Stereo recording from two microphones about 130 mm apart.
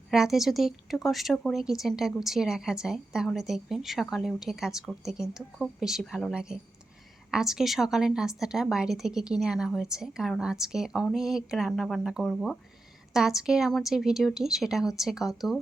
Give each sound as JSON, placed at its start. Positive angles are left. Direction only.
{"t": 0.1, "sound": "a woman's voice", "side_deg": -5}